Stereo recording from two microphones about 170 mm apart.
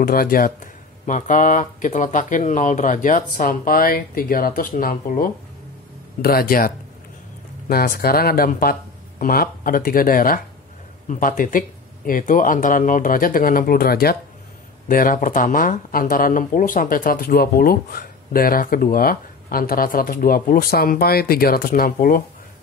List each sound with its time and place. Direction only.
0.0 s speech: 60° left (ahead or behind)
1.0 s speech: 50° left (ahead or behind)